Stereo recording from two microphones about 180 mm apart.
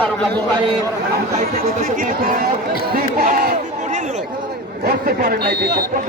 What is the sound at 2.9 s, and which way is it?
Speech, 55° right (ahead or behind).